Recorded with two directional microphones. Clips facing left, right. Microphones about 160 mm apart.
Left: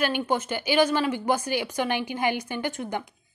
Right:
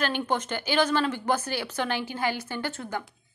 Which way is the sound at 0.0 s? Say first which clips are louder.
Left 2 dB; 10° left (ahead or behind).